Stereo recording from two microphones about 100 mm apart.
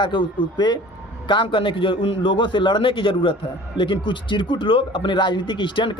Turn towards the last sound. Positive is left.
turn(degrees=55)  # may be behind; listen again after turning